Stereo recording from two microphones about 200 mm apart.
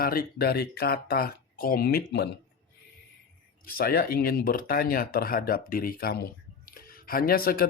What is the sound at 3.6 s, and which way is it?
Speech, 45° left (ahead or behind).